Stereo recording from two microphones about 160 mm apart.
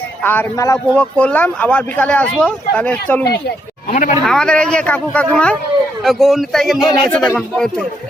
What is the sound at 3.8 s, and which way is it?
Speech, 50° left (ahead or behind).